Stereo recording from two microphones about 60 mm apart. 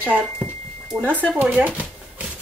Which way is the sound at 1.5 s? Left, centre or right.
Right.